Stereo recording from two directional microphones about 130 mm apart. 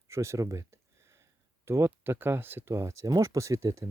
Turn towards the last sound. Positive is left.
turn(degrees=-25)  # may be behind; listen again after turning